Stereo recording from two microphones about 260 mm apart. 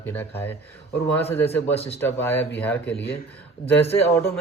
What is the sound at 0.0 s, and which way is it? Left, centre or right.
Speech, centre.